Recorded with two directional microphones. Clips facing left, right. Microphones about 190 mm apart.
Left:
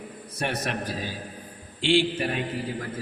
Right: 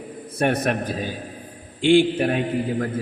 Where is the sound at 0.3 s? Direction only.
55° right (ahead or behind).